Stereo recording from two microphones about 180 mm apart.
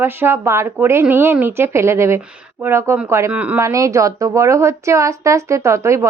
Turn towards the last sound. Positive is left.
turn(degrees=-15)  # may be behind; listen again after turning